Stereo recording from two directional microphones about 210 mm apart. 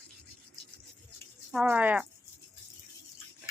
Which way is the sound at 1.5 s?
5° right (ahead or behind).